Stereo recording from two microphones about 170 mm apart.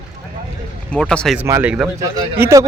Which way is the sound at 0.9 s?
5° left (ahead or behind).